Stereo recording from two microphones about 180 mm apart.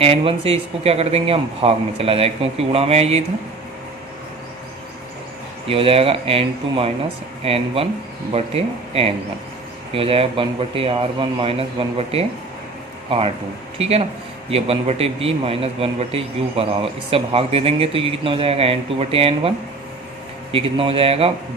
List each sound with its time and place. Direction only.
0.0 s a man's voice: 35° right (ahead or behind)
5.6 s a man's voice: 30° right (ahead or behind)